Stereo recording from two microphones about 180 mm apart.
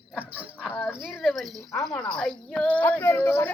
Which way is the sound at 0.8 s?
Centre (ahead or behind).